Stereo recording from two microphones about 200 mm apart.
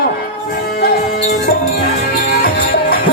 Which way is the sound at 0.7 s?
50° left (ahead or behind).